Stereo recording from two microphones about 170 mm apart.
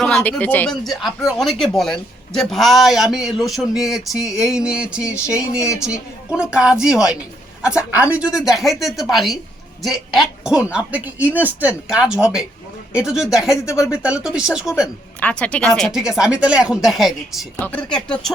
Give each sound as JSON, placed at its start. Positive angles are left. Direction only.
{"t": 0.0, "sound": "a man's voice", "side_deg": 5}
{"t": 5.5, "sound": "speech", "side_deg": 20}
{"t": 5.8, "sound": "a man's voice", "side_deg": -5}
{"t": 15.2, "sound": "a man's voice", "side_deg": 5}